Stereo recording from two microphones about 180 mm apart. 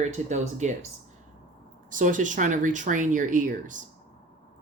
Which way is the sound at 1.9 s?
45° right (ahead or behind).